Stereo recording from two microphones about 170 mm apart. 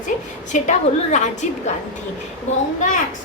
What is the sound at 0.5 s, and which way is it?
Speech, 45° left (ahead or behind).